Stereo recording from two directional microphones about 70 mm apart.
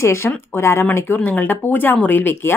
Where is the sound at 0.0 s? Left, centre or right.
Left.